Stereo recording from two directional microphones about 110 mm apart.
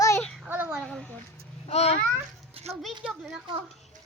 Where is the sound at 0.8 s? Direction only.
5° left (ahead or behind).